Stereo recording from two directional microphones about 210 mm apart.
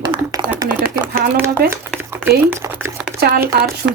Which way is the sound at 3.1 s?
45° right (ahead or behind).